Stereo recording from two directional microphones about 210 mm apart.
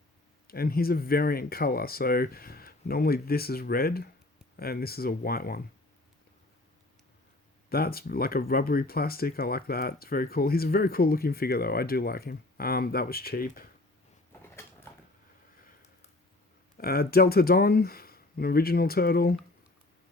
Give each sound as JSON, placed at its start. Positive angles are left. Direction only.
{"t": 0.4, "sound": "speech", "side_deg": 45}
{"t": 7.7, "sound": "speech", "side_deg": 45}
{"t": 16.7, "sound": "speech", "side_deg": 45}